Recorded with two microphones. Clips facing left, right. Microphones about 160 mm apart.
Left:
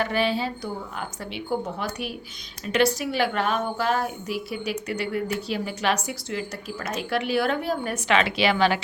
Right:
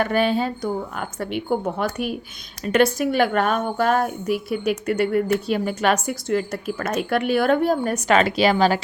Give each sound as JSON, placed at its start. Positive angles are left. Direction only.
{"t": 0.0, "sound": "a woman's voice", "side_deg": -50}